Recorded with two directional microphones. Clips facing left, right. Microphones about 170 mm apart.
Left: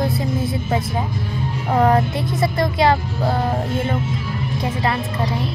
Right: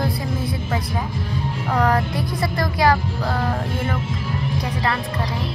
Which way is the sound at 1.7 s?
25° left (ahead or behind).